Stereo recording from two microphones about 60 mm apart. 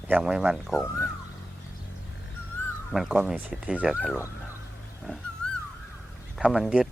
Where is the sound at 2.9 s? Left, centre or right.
Centre.